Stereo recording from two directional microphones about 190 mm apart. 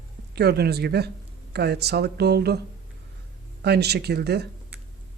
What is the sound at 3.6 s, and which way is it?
Speech, 60° right (ahead or behind).